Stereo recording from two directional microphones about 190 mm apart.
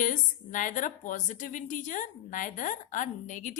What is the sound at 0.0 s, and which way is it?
A woman's voice, 45° left (ahead or behind).